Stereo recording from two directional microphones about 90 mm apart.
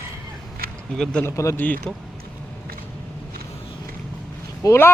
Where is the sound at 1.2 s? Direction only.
35° left (ahead or behind).